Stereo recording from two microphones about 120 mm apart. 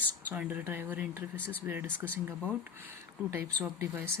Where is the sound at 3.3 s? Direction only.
20° right (ahead or behind).